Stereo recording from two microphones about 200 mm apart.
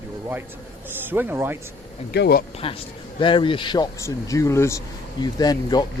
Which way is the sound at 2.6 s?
25° left (ahead or behind).